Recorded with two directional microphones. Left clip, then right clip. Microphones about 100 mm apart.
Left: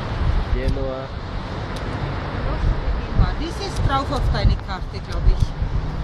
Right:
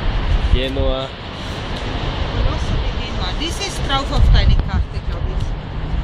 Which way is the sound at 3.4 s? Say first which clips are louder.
Right 4 dB; 45° left (ahead or behind).